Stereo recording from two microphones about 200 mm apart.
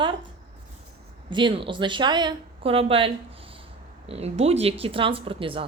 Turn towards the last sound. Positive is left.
turn(degrees=-25)  # may be behind; listen again after turning